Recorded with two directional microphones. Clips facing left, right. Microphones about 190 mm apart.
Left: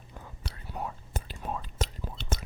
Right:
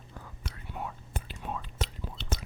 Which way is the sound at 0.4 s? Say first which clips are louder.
Left 2 dB; 40° left (ahead or behind).